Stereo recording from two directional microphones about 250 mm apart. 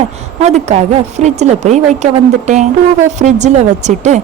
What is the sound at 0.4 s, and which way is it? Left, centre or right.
Speech, right.